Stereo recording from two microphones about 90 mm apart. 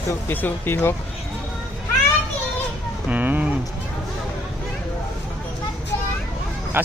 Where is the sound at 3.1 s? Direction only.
15° right (ahead or behind).